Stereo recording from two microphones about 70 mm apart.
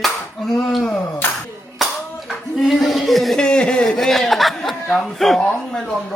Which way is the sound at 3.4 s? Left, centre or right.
Centre.